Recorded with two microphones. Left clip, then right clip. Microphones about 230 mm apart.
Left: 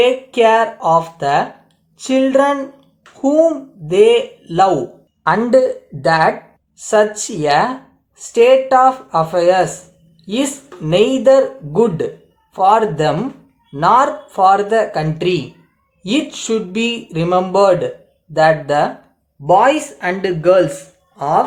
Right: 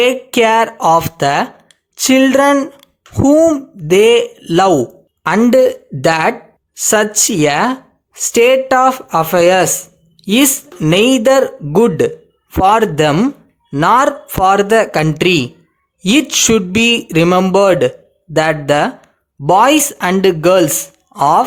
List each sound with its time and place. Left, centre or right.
0.0 s speech: right